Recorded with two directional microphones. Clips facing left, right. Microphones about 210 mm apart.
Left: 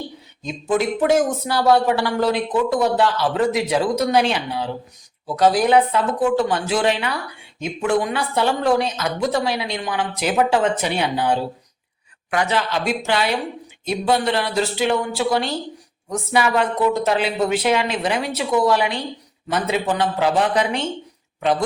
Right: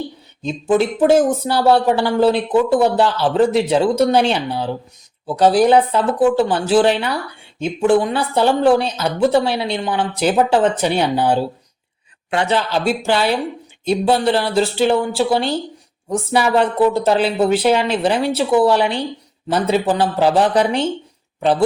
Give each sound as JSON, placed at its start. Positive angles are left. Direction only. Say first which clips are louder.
{"t": 0.4, "sound": "speech", "louder": "right 4 dB", "side_deg": -30}